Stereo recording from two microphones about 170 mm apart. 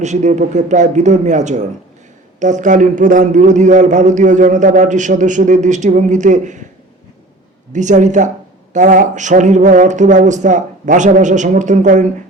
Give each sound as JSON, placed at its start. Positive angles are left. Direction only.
{"t": 0.0, "sound": "a man's voice", "side_deg": -45}
{"t": 7.7, "sound": "a man's voice", "side_deg": -45}